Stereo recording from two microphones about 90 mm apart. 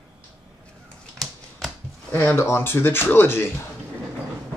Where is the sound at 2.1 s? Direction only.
25° left (ahead or behind).